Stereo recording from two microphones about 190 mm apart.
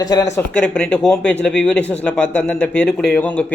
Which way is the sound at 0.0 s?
20° left (ahead or behind).